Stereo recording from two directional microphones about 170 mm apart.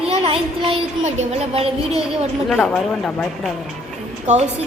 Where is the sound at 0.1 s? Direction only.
35° right (ahead or behind).